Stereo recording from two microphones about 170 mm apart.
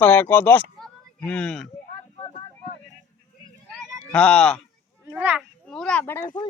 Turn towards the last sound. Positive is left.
turn(degrees=15)  # may be behind; listen again after turning